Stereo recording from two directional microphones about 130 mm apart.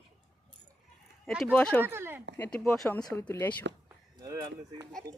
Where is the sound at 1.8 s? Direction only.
20° right (ahead or behind).